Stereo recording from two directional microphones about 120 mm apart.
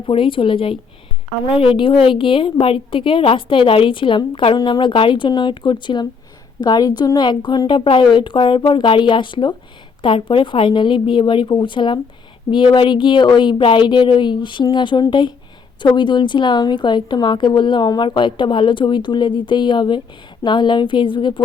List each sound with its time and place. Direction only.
0.0 s a woman's voice: 45° left (ahead or behind)